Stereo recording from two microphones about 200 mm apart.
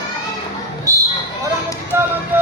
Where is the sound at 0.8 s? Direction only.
15° right (ahead or behind).